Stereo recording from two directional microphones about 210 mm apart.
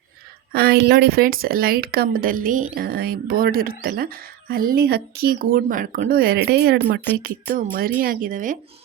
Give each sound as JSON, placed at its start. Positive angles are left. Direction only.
{"t": 0.5, "sound": "speech", "side_deg": -50}